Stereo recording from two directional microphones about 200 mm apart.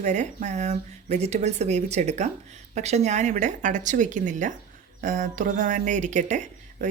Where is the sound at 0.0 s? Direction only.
35° right (ahead or behind).